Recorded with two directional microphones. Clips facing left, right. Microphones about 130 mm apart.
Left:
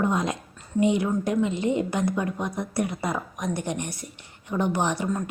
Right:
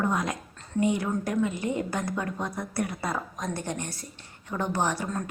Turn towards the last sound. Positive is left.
turn(degrees=15)  # may be behind; listen again after turning